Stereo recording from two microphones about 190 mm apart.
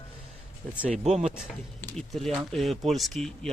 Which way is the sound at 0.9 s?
35° right (ahead or behind).